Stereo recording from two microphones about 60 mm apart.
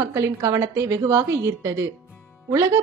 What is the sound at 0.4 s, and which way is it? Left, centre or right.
Speech, right.